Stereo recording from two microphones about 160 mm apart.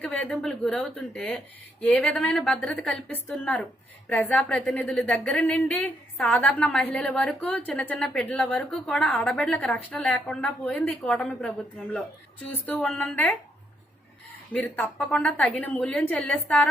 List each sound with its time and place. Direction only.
0.0 s a woman's voice: 10° left (ahead or behind)
12.6 s a woman's voice: 5° left (ahead or behind)
14.5 s a woman's voice: 10° left (ahead or behind)